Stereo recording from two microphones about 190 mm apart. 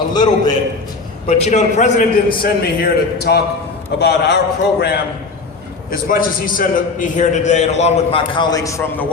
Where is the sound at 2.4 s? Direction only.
55° left (ahead or behind).